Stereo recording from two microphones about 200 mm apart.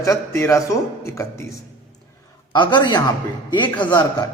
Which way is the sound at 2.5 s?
20° left (ahead or behind).